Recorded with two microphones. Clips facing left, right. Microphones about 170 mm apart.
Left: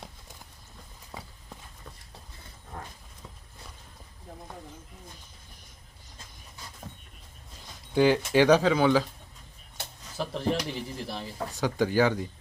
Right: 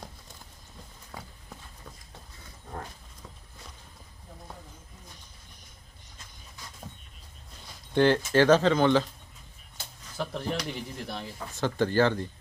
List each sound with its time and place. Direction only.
1.1 s walk: 5° left (ahead or behind)
7.9 s speech: 10° left (ahead or behind)
9.8 s a sound: 65° left (ahead or behind)
10.2 s speech: centre (ahead or behind)
11.5 s speech: 10° left (ahead or behind)